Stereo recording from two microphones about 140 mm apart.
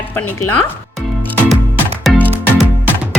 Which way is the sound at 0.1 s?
15° left (ahead or behind).